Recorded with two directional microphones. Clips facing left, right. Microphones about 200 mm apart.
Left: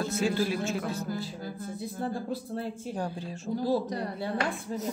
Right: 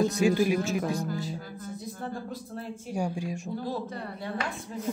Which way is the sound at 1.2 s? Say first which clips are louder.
Even; 30° left (ahead or behind).